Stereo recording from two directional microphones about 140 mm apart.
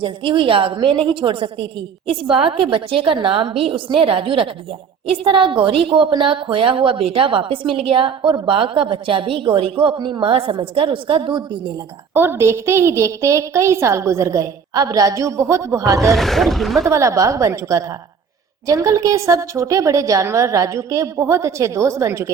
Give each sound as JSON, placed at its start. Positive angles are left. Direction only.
{"t": 0.0, "sound": "a woman's voice", "side_deg": -40}
{"t": 12.1, "sound": "a woman's voice", "side_deg": -15}
{"t": 16.1, "sound": "speech", "side_deg": 0}
{"t": 16.9, "sound": "a woman's voice", "side_deg": -20}